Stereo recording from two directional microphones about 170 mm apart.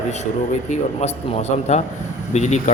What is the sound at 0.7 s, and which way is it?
A man's voice, 40° left (ahead or behind).